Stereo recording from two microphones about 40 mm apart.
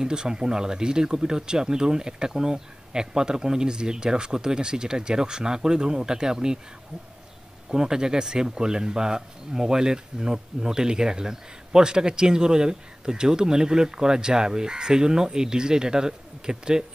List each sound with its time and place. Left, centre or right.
0.0 s speech: centre
7.7 s speech: centre